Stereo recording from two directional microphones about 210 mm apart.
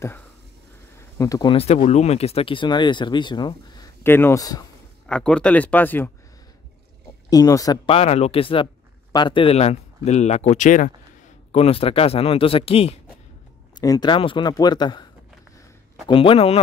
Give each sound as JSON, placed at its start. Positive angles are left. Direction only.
{"t": 1.1, "sound": "speech", "side_deg": 15}
{"t": 5.0, "sound": "speech", "side_deg": 5}
{"t": 7.2, "sound": "speech", "side_deg": 15}
{"t": 16.1, "sound": "speech", "side_deg": 25}